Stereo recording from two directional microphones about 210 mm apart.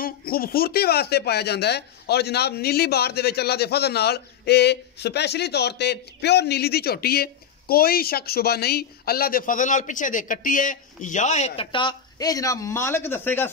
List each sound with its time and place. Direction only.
0.0 s speech: 45° left (ahead or behind); by 13.5 s 10° left (ahead or behind)